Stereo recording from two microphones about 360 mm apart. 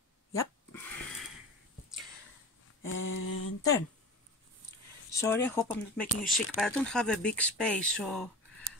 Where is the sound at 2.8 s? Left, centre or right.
Left.